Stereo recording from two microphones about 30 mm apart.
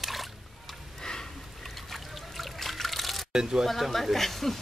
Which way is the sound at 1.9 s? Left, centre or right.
Centre.